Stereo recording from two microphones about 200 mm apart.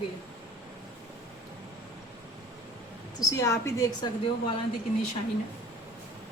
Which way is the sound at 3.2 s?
15° left (ahead or behind).